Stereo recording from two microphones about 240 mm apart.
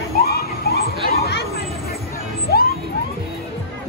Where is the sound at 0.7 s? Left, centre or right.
Left.